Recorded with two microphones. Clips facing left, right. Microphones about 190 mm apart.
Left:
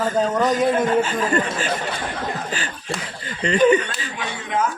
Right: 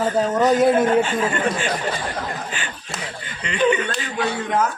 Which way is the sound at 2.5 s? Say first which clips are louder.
Left 3 dB; 40° left (ahead or behind).